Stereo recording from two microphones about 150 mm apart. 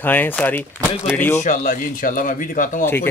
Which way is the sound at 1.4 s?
55° left (ahead or behind).